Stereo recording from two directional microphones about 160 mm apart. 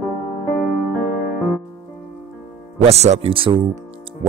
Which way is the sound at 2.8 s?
40° right (ahead or behind).